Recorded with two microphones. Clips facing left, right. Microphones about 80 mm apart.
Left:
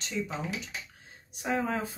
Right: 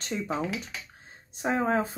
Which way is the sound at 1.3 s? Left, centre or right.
Right.